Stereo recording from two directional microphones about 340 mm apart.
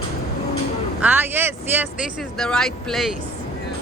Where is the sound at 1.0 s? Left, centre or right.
Centre.